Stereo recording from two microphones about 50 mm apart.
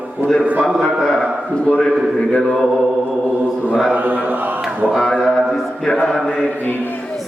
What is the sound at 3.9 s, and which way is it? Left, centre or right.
Speech, right.